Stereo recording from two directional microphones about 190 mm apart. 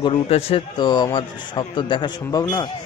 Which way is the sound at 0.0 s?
30° left (ahead or behind).